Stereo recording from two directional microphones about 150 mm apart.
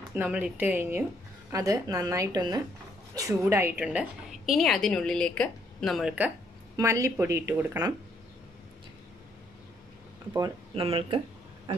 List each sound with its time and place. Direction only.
0.1 s a woman's voice: 10° right (ahead or behind)
6.8 s a woman's voice: 20° right (ahead or behind)
10.7 s speech: 40° right (ahead or behind)